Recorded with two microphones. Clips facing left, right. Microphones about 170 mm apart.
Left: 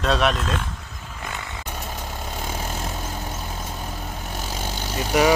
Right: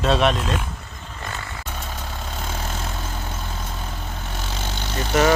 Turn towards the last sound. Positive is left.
turn(degrees=10)  # may be behind; listen again after turning